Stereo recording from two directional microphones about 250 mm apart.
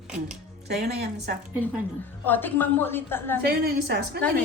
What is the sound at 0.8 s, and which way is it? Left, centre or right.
Speech, right.